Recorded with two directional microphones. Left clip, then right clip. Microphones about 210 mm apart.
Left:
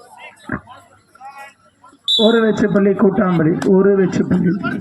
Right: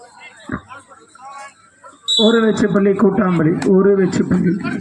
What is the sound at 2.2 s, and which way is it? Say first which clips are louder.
Speech: even; 15° left (ahead or behind).